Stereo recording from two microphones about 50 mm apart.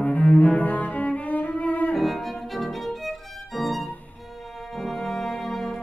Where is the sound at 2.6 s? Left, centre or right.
Centre.